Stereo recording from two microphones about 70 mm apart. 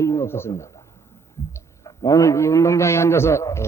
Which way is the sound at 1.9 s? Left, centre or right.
Left.